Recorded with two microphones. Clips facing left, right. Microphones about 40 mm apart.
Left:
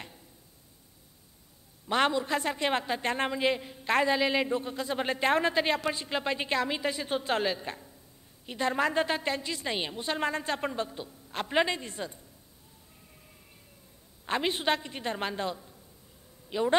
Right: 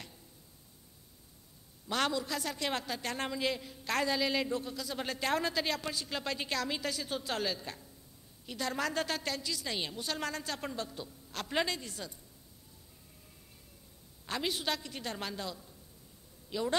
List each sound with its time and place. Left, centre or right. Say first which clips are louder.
1.9 s a man's voice: left 6 dB; left
14.2 s a woman's voice: left 6 dB; left